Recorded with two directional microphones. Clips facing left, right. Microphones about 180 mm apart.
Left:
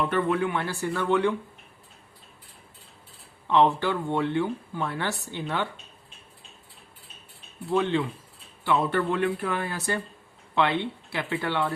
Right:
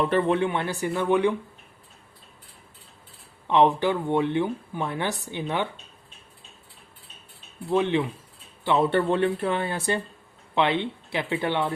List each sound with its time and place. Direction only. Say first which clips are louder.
0.1 s speech: right 3 dB; 30° right (ahead or behind)
3.4 s speech: right 2 dB; 15° right (ahead or behind)
7.7 s speech: right 2 dB; 15° right (ahead or behind)